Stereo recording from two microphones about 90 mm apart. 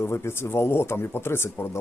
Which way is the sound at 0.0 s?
30° left (ahead or behind).